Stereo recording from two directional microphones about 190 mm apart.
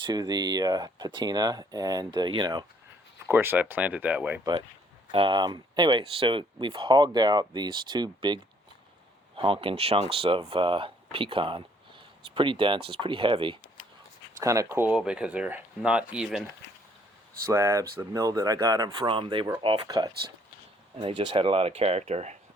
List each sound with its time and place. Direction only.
0.0 s speech: 20° right (ahead or behind)
3.2 s speech: 10° right (ahead or behind)
5.1 s speech: 25° right (ahead or behind); by 16.4 s 5° right (ahead or behind)
17.3 s speech: 15° right (ahead or behind); by 22.4 s 35° right (ahead or behind)